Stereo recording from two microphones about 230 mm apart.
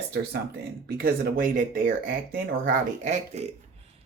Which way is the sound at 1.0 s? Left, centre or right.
Right.